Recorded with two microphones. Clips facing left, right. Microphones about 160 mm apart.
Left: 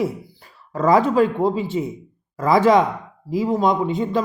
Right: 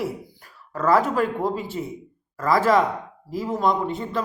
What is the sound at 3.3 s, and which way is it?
Speech, centre (ahead or behind).